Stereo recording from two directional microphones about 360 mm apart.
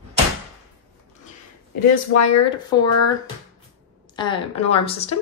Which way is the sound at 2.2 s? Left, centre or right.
Centre.